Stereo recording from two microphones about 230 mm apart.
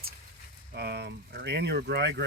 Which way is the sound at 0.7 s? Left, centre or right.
Right.